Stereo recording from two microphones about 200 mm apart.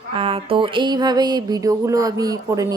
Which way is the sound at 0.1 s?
30° right (ahead or behind).